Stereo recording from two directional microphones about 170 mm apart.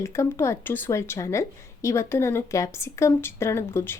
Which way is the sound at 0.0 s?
15° left (ahead or behind).